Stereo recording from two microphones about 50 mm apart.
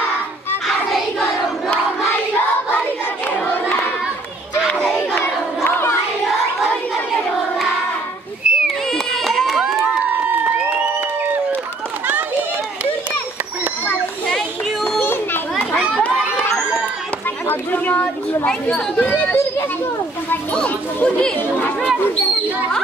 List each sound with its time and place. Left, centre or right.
3.3 s crowd: left
5.2 s crowd: left
8.5 s children playing: centre
8.9 s a sound: centre
15.0 s children playing: left
17.5 s a sound: left
18.5 s speech: left
19.0 s speech: left
20.5 s speech: left